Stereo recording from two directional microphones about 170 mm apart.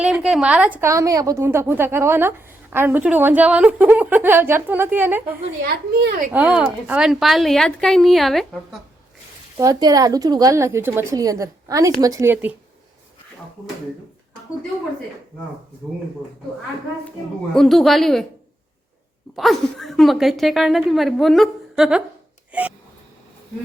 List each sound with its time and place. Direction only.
0.0 s a woman's voice: 5° right (ahead or behind)
5.6 s speech: 60° right (ahead or behind)
6.3 s a woman's voice: 10° right (ahead or behind)
9.6 s a woman's voice: 20° right (ahead or behind)
17.5 s a woman's voice: centre (ahead or behind)
19.4 s a woman's voice: centre (ahead or behind)